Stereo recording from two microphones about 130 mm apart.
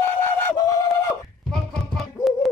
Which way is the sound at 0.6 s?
30° left (ahead or behind).